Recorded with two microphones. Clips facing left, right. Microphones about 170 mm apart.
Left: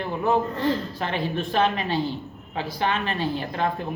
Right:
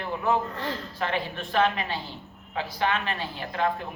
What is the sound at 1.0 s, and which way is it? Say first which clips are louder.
Speech: left 3 dB; 30° left (ahead or behind).